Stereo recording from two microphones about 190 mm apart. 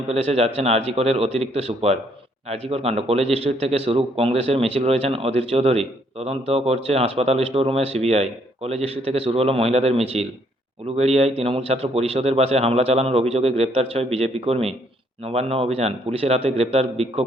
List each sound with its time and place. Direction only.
0.1 s a man's voice: 30° right (ahead or behind)